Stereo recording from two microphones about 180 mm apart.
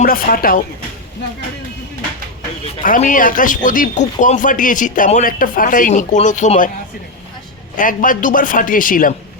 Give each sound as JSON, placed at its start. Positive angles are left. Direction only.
{"t": 0.0, "sound": "speech", "side_deg": 50}
{"t": 2.8, "sound": "speech", "side_deg": 50}
{"t": 7.8, "sound": "speech", "side_deg": 50}